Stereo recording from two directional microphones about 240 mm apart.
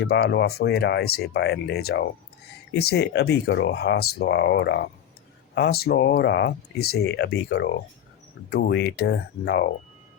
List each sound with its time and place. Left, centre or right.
0.0 s speech: left